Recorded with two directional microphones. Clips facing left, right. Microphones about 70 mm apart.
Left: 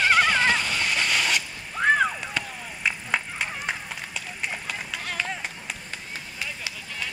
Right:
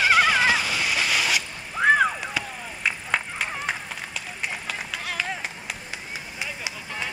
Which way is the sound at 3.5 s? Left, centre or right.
Centre.